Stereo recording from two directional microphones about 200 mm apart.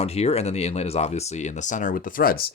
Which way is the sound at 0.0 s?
30° left (ahead or behind).